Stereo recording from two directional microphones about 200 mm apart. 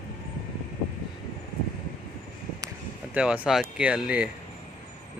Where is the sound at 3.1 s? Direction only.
5° right (ahead or behind).